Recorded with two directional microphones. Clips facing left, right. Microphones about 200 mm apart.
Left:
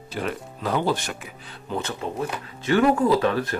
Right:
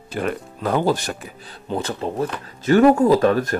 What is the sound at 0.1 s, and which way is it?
Speech, 50° right (ahead or behind).